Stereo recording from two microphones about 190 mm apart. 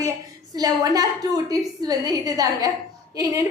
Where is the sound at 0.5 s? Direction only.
20° right (ahead or behind).